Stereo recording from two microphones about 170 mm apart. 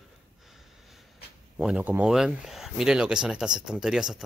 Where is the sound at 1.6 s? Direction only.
5° right (ahead or behind).